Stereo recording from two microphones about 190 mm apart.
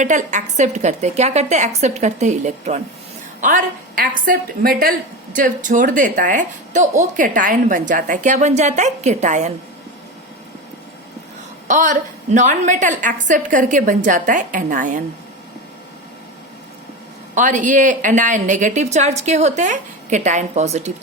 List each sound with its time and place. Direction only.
0.0 s a woman's voice: 40° right (ahead or behind)
11.7 s a woman's voice: 40° right (ahead or behind)
17.3 s a woman's voice: 40° right (ahead or behind)